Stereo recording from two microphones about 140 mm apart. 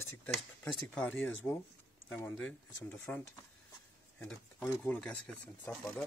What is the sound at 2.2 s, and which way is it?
Speech, 10° left (ahead or behind).